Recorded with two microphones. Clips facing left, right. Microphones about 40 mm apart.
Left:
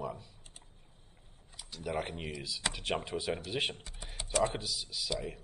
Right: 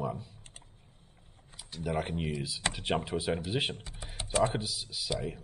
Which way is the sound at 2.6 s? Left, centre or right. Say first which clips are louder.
Right 3 dB; right.